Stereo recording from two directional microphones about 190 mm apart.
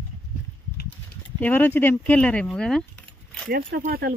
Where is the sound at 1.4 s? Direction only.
10° left (ahead or behind).